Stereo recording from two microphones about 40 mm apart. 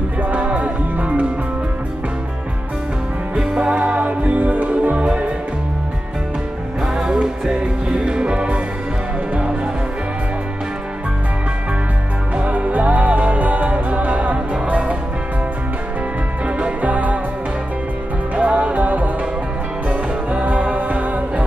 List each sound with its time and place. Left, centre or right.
0.2 s music: right
3.3 s music: right
7.0 s music: centre
12.4 s music: right
16.4 s music: right
16.8 s music: right
18.3 s music: right